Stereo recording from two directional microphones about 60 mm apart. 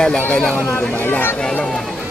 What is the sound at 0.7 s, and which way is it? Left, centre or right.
Speech, left.